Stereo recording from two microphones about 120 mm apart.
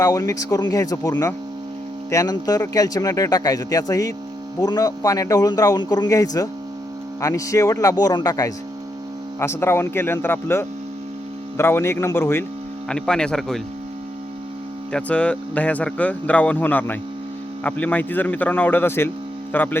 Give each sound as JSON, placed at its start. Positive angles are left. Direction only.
{"t": 0.0, "sound": "a man's voice", "side_deg": 25}
{"t": 12.9, "sound": "speech", "side_deg": 5}
{"t": 14.9, "sound": "speech", "side_deg": 10}